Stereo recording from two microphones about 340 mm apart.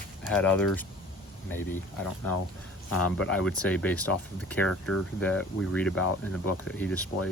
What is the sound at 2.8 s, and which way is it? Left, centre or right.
Speech, left.